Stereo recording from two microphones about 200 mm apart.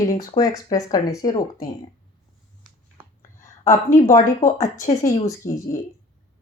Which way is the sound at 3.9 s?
40° left (ahead or behind).